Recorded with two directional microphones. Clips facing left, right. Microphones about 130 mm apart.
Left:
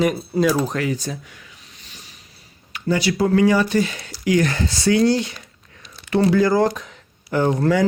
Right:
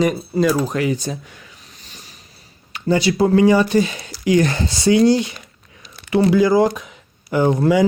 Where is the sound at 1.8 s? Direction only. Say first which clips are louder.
Right 2 dB; 35° right (ahead or behind).